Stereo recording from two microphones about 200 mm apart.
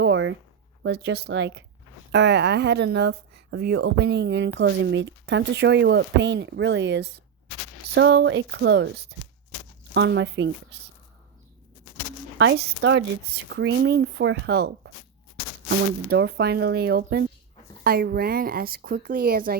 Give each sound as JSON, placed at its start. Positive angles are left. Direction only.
{"t": 0.0, "sound": "a sound", "side_deg": -70}
{"t": 0.8, "sound": "speech", "side_deg": -55}
{"t": 9.9, "sound": "speech", "side_deg": -65}
{"t": 12.4, "sound": "speech", "side_deg": -65}
{"t": 13.3, "sound": "speech", "side_deg": -60}
{"t": 16.0, "sound": "speech", "side_deg": -55}